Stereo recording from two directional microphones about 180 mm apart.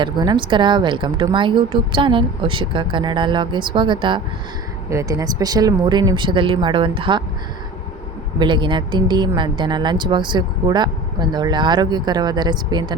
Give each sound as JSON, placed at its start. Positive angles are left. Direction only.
{"t": 0.0, "sound": "speech", "side_deg": -25}
{"t": 8.4, "sound": "speech", "side_deg": -25}